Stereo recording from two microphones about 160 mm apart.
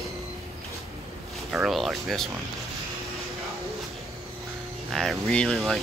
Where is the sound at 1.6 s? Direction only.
Centre (ahead or behind).